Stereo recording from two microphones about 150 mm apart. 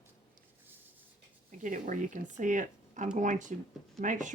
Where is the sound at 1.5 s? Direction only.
55° right (ahead or behind).